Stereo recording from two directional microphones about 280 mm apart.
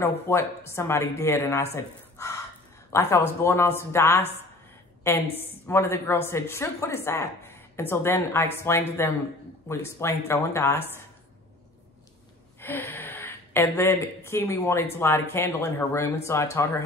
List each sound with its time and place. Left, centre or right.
0.3 s speech: centre
12.5 s speech: centre